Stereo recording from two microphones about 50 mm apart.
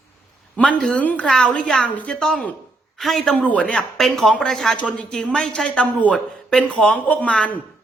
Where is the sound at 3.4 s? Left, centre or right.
Left.